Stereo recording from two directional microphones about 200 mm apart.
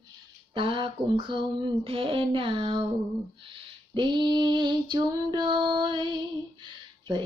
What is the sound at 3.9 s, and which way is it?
Female singing, 25° right (ahead or behind).